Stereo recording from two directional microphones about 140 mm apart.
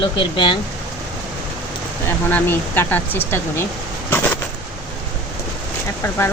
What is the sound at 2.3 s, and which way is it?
Speech, 15° left (ahead or behind).